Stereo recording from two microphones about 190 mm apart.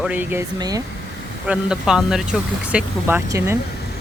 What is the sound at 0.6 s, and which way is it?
Speech, 20° right (ahead or behind).